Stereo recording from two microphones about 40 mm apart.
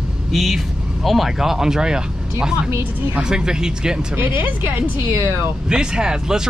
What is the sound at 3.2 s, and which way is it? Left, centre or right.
Speech, centre.